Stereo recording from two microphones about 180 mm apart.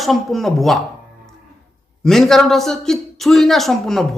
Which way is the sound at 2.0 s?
Centre (ahead or behind).